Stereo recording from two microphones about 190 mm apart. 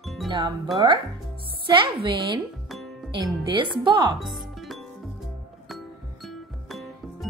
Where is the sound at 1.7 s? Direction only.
25° right (ahead or behind).